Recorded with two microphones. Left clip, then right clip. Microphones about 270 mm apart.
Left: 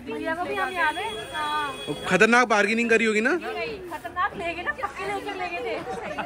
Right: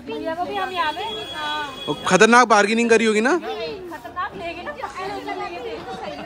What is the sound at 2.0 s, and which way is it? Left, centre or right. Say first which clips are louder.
A man's voice: right 5 dB; centre.